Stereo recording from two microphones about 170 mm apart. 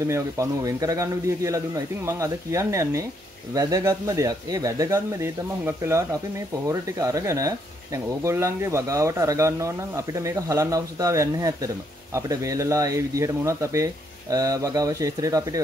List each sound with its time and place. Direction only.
0.0 s speech: 15° right (ahead or behind)